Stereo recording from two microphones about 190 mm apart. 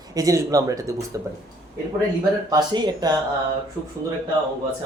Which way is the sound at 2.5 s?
20° right (ahead or behind).